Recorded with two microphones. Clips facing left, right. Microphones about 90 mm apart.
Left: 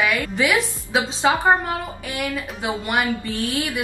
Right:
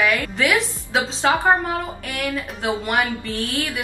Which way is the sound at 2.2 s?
5° left (ahead or behind).